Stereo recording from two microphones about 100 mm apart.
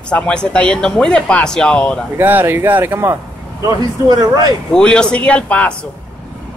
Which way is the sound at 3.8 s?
40° right (ahead or behind).